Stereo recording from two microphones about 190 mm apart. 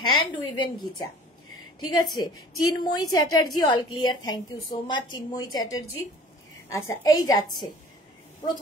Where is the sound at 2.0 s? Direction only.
20° left (ahead or behind).